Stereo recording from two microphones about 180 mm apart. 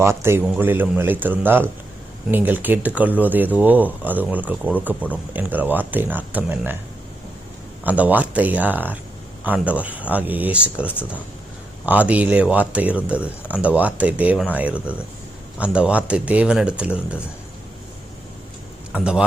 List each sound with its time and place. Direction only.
0.0 s speech: 15° right (ahead or behind)
7.9 s speech: 10° right (ahead or behind)
18.9 s speech: 5° right (ahead or behind)